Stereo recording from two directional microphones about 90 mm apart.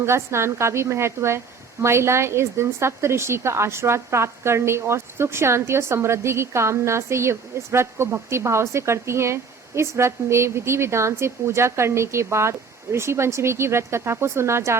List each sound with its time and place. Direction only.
0.0 s a woman's voice: 30° right (ahead or behind)